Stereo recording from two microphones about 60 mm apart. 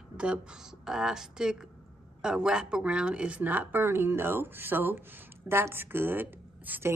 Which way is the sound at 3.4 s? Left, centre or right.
Right.